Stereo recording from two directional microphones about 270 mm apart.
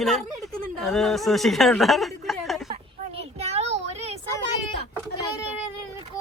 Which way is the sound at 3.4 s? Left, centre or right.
Right.